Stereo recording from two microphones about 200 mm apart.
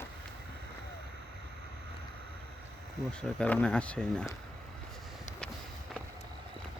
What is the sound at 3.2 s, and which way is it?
Speech, 5° left (ahead or behind).